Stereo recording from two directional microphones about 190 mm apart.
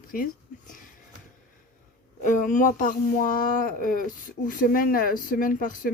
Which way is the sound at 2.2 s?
45° left (ahead or behind).